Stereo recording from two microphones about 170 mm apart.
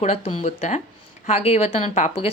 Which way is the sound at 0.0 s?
40° left (ahead or behind).